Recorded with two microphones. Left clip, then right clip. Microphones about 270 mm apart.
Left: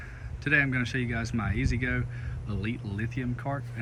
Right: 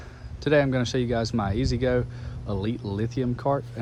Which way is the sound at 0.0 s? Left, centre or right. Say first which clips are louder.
Right 5 dB; centre.